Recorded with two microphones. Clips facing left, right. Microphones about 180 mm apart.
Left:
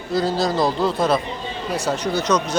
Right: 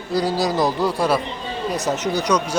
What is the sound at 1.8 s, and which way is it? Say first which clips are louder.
Speech: left 1 dB; 20° right (ahead or behind).